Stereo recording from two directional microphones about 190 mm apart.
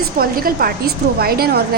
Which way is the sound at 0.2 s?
50° right (ahead or behind).